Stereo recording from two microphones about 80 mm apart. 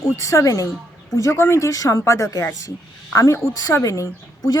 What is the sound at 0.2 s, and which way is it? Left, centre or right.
A woman's voice, left.